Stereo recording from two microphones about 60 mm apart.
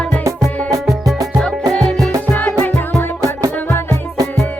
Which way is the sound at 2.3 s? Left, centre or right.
Left.